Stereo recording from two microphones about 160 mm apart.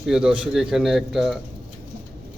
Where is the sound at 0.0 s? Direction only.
5° right (ahead or behind).